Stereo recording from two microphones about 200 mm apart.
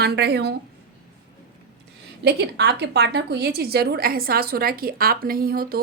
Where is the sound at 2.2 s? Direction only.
55° right (ahead or behind).